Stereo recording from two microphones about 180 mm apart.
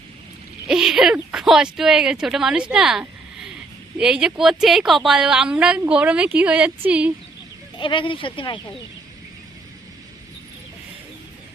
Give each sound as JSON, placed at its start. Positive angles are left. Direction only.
{"t": 0.7, "sound": "a woman's voice", "side_deg": -5}
{"t": 7.8, "sound": "speech", "side_deg": 25}